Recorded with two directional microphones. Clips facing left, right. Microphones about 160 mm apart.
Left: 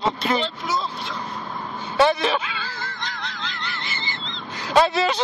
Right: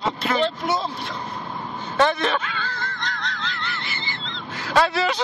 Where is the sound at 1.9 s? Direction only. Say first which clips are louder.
Left 2 dB; 10° left (ahead or behind).